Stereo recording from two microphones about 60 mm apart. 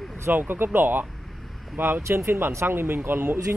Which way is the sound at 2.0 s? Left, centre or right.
Right.